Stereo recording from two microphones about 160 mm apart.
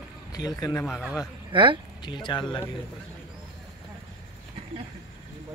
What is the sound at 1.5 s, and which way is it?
Speech, 30° right (ahead or behind).